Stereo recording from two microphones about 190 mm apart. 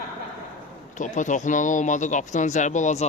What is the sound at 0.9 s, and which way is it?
Speech, 40° left (ahead or behind).